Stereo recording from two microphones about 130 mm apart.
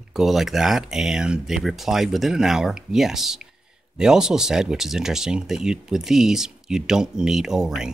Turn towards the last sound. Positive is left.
turn(degrees=-5)  # may be behind; listen again after turning